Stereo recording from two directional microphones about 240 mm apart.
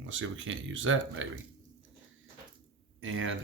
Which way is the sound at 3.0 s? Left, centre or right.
Right.